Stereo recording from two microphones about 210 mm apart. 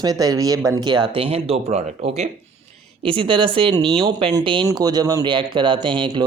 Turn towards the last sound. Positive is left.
turn(degrees=-25)  # may be behind; listen again after turning